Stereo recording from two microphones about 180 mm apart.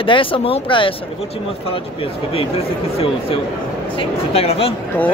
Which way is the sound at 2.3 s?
30° left (ahead or behind).